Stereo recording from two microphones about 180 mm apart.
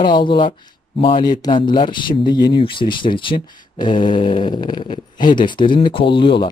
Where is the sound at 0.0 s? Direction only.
25° left (ahead or behind).